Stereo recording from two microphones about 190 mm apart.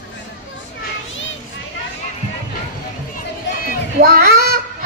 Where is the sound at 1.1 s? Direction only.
80° left.